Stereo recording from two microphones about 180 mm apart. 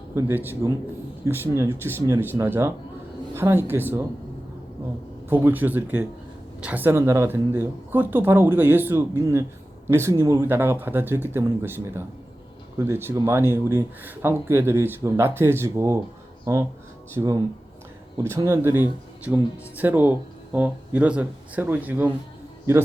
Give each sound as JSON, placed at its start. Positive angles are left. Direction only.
{"t": 0.1, "sound": "speech", "side_deg": -15}
{"t": 5.3, "sound": "speech", "side_deg": -10}
{"t": 17.2, "sound": "speech", "side_deg": -20}